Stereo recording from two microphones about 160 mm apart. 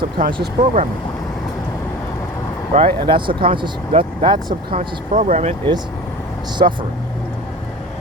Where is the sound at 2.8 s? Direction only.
30° right (ahead or behind).